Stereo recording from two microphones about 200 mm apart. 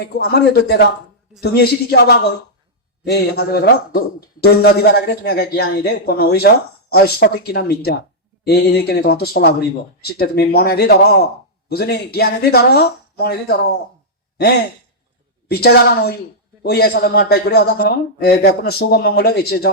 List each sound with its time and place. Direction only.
0.0 s a man's voice: 50° left (ahead or behind)